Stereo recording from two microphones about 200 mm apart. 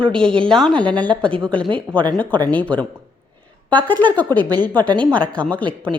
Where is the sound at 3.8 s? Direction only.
10° left (ahead or behind).